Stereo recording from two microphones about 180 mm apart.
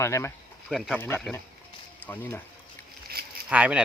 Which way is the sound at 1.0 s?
10° left (ahead or behind).